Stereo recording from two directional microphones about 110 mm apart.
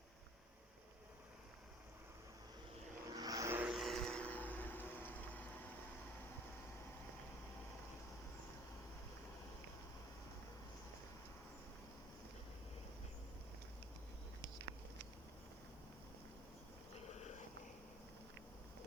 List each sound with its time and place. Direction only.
3.2 s vehicle: 35° right (ahead or behind)
3.5 s vehicle: 15° right (ahead or behind)
3.8 s vehicle: centre (ahead or behind); by 5.5 s 15° left (ahead or behind)